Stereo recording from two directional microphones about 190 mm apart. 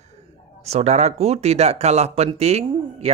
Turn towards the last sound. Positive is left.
turn(degrees=-35)  # may be behind; listen again after turning